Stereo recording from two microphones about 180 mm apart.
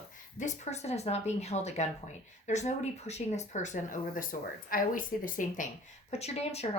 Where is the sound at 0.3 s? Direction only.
40° left (ahead or behind).